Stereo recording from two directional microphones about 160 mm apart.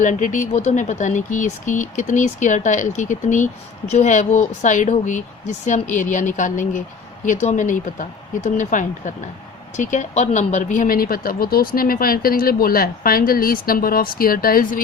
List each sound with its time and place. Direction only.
0.0 s speech: 50° left (ahead or behind)